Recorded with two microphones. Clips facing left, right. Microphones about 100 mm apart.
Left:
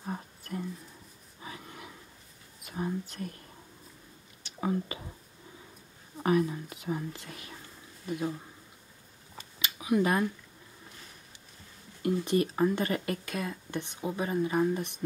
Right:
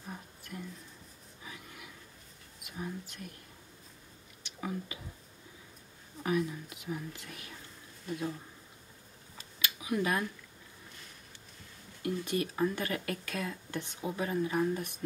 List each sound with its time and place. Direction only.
0.0 s a sound: 40° left (ahead or behind)
2.6 s speech: 35° left (ahead or behind)
4.4 s whispering: 35° left (ahead or behind)
6.2 s speech: 35° left (ahead or behind)
8.1 s speech: 15° left (ahead or behind)
9.6 s a sound: 25° left (ahead or behind)
12.0 s speech: 30° left (ahead or behind)